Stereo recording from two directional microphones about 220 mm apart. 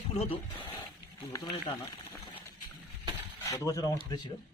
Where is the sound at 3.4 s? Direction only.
15° left (ahead or behind).